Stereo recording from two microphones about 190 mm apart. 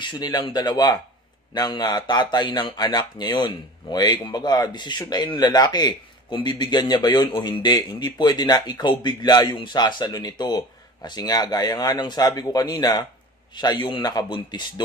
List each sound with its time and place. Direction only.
0.0 s speech: 20° left (ahead or behind)